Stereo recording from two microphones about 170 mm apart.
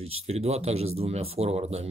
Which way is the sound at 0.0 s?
40° right (ahead or behind).